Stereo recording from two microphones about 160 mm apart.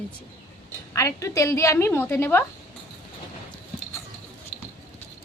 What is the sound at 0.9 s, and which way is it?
Speech, 20° left (ahead or behind).